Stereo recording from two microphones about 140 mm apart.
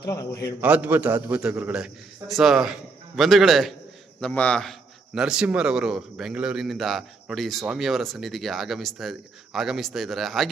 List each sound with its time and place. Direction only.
0.0 s a man's voice: 25° left (ahead or behind)
0.6 s a man's voice: 10° right (ahead or behind)